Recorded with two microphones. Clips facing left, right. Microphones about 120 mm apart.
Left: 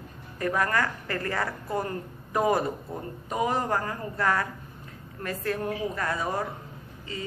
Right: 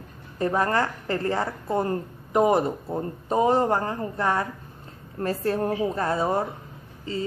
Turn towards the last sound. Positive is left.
turn(degrees=-30)  # may be behind; listen again after turning